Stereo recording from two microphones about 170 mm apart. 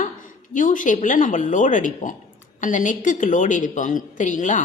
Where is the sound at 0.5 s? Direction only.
50° left (ahead or behind).